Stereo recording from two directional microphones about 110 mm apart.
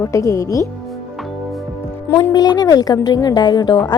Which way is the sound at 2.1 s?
35° left (ahead or behind).